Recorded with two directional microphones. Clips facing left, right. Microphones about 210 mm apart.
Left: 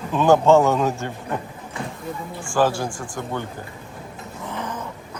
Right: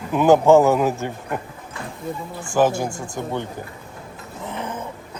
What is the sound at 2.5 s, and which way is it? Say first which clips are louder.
Speech: right 2 dB; 20° right (ahead or behind).